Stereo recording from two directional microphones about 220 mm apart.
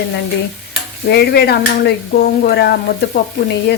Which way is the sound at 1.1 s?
45° left (ahead or behind).